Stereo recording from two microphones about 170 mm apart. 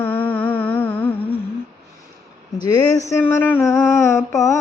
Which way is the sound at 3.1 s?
15° left (ahead or behind).